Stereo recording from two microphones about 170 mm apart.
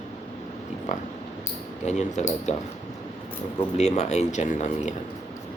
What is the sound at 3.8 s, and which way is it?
Speech, 40° left (ahead or behind).